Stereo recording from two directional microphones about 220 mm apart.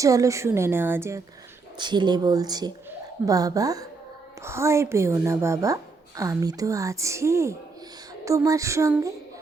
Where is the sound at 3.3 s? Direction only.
15° right (ahead or behind).